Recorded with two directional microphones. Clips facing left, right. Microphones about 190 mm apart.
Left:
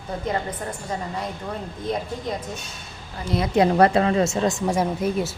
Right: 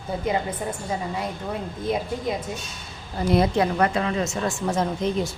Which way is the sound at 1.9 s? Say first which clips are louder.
Right 2 dB; 5° right (ahead or behind).